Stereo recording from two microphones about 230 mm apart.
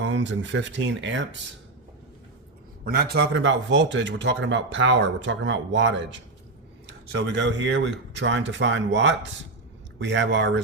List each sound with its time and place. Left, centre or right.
0.0 s a man's voice: right
2.8 s a man's voice: right
7.3 s a man's voice: right